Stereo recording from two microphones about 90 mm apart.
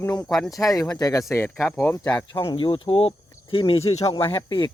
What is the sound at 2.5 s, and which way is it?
Speech, 70° left (ahead or behind).